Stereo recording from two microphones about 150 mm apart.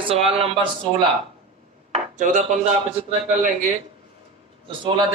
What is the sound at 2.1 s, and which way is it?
Dishes, 55° right (ahead or behind).